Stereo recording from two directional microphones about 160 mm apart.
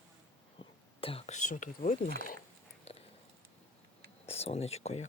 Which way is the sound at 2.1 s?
65° left (ahead or behind).